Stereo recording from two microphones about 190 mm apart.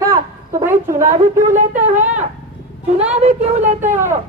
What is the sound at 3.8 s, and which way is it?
Speech, 10° right (ahead or behind).